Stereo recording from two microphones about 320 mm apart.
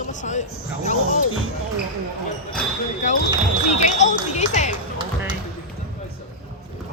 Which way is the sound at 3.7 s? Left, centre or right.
Left.